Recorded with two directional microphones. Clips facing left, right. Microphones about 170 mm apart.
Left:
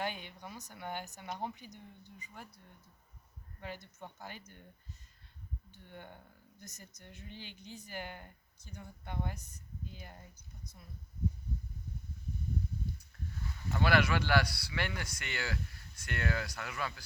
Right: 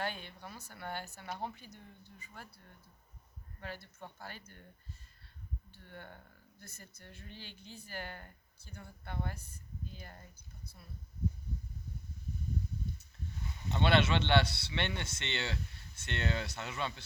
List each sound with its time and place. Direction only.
0.0 s speech: 15° left (ahead or behind)
3.6 s speech: 15° left (ahead or behind)
5.7 s speech: 15° left (ahead or behind)
13.0 s speech: 20° right (ahead or behind)